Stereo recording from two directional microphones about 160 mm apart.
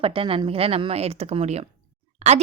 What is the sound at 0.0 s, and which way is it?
A woman's voice, 35° right (ahead or behind).